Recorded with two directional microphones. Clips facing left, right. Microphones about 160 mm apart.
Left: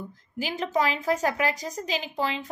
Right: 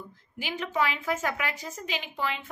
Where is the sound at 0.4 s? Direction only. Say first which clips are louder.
Left 3 dB; 40° left (ahead or behind).